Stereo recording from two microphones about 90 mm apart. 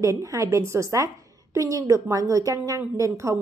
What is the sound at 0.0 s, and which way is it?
Speech, 35° right (ahead or behind).